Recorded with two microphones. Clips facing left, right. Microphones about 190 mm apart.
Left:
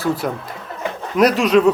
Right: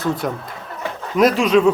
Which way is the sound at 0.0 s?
5° left (ahead or behind).